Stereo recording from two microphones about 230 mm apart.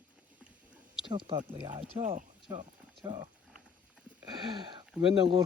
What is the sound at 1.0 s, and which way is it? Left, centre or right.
Speech, right.